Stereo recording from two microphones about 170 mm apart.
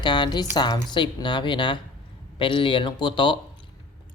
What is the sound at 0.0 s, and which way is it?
Speech, 25° left (ahead or behind).